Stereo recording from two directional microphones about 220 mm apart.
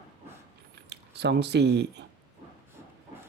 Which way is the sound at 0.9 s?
50° right (ahead or behind).